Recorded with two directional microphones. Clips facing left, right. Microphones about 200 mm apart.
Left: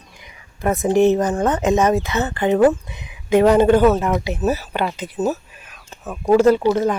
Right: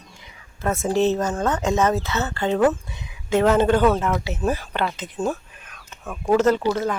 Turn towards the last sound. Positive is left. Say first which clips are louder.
# left 5 dB
turn(degrees=20)  # may be behind; listen again after turning